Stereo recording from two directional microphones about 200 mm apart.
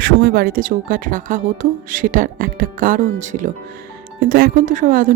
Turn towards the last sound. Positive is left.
turn(degrees=-40)  # may be behind; listen again after turning